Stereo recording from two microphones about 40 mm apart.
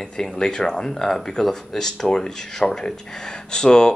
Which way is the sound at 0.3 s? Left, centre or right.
Left.